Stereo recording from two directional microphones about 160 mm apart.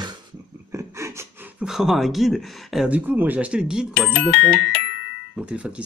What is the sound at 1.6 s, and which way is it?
Speech, 5° right (ahead or behind).